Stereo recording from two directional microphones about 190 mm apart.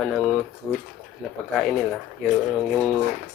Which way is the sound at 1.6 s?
Centre (ahead or behind).